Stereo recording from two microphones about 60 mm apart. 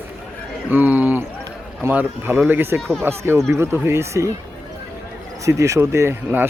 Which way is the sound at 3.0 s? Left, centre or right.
Right.